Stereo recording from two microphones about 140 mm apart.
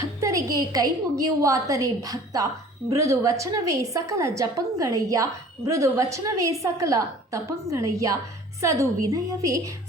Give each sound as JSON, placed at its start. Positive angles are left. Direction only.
{"t": 0.0, "sound": "a woman's voice", "side_deg": -25}